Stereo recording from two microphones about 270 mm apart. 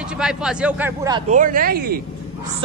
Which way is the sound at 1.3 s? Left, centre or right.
Right.